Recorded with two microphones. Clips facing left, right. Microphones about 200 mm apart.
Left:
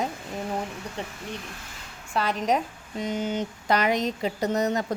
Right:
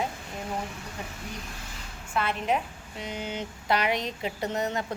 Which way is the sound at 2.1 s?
35° left (ahead or behind).